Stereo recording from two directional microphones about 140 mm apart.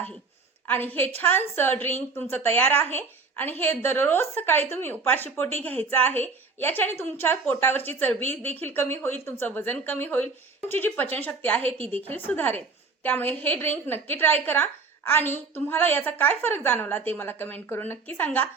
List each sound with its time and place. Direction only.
0.7 s a woman's voice: 15° left (ahead or behind)
11.9 s a woman's voice: 45° right (ahead or behind)
12.1 s a woman's voice: 15° left (ahead or behind)